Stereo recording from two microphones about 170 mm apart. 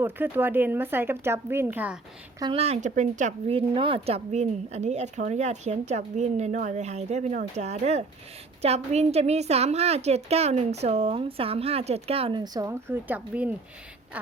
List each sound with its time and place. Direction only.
0.0 s speech: 10° right (ahead or behind)
2.4 s a woman's voice: 35° right (ahead or behind); by 13.6 s 10° right (ahead or behind)